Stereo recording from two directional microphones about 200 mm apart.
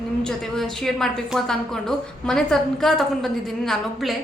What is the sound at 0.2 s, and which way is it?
A woman's voice, 5° left (ahead or behind).